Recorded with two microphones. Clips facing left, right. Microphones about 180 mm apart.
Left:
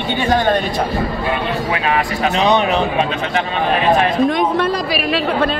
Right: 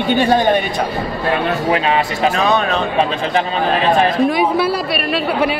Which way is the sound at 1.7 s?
30° right (ahead or behind).